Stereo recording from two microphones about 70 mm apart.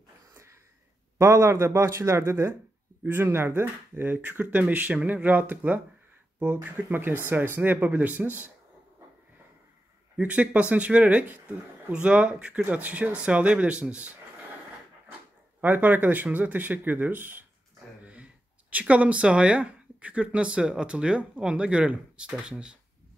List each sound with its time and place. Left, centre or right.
1.1 s a man's voice: right
3.0 s speech: right
10.1 s speech: centre
15.6 s speech: right